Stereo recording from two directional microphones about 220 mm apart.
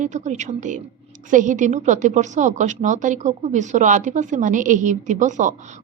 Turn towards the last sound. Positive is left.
turn(degrees=-35)  # may be behind; listen again after turning